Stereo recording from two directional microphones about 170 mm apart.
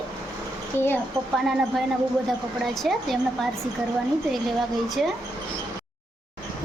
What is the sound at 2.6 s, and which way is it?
Speech, centre (ahead or behind).